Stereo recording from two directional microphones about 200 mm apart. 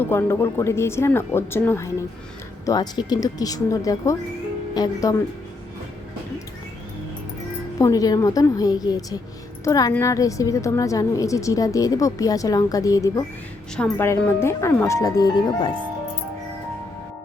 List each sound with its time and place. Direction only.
0.0 s a woman's voice: 15° left (ahead or behind)
7.8 s a woman's voice: 15° left (ahead or behind)